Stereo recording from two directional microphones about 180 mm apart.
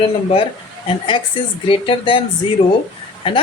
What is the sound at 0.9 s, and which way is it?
A woman's voice, 30° left (ahead or behind).